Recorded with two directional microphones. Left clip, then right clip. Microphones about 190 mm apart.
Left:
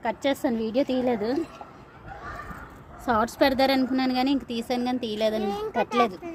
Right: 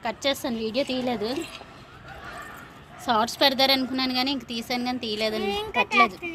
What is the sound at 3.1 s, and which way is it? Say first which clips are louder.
A woman's voice: right 1 dB; 45° left (ahead or behind).